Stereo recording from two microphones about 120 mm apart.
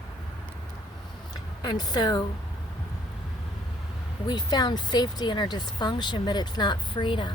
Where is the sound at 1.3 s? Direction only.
35° left (ahead or behind).